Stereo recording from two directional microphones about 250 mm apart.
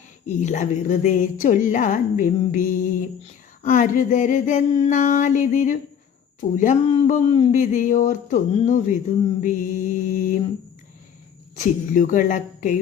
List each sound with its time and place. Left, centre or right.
0.3 s a woman's voice: left
11.5 s a woman's voice: left